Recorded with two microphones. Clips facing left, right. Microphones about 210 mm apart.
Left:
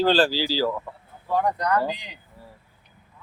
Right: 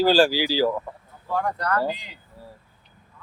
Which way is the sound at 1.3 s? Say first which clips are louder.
Left 2 dB; 15° left (ahead or behind).